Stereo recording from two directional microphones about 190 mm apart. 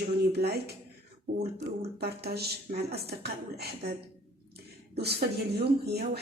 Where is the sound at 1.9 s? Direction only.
55° right (ahead or behind).